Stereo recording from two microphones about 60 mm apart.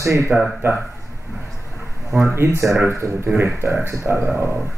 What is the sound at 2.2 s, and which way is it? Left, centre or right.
Speech, right.